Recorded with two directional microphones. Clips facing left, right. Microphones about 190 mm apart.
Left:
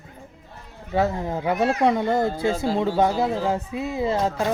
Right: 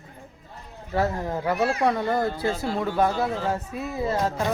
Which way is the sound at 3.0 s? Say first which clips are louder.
Left 3 dB; 15° left (ahead or behind).